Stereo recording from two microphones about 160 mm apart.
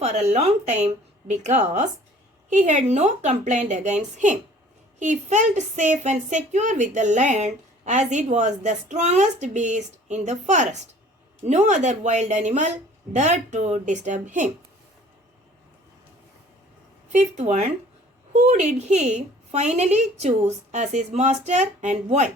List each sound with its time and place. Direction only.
0.0 s speech: 45° right (ahead or behind)
17.1 s speech: 50° right (ahead or behind)